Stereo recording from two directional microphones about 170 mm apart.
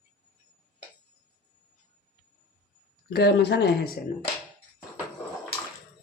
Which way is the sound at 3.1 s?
70° left (ahead or behind).